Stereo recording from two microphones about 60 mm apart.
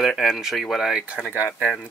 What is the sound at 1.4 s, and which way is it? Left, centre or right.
Speech, right.